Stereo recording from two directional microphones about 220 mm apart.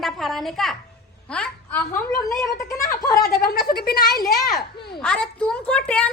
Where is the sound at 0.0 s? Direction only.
Centre (ahead or behind).